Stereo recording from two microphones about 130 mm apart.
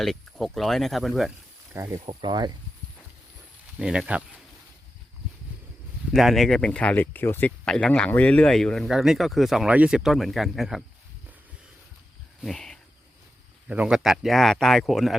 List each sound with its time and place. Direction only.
0.0 s speech: centre (ahead or behind)
2.0 s speech: 35° right (ahead or behind)
3.8 s speech: 5° right (ahead or behind)
6.1 s speech: centre (ahead or behind)
12.4 s cricket: 5° left (ahead or behind)
13.7 s speech: 10° right (ahead or behind)